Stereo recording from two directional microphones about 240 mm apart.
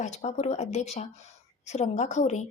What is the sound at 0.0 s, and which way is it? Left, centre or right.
Speech, left.